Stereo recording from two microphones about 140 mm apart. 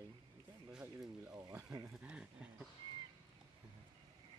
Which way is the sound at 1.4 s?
25° right (ahead or behind).